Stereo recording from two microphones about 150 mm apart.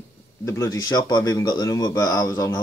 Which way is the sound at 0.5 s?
20° left (ahead or behind).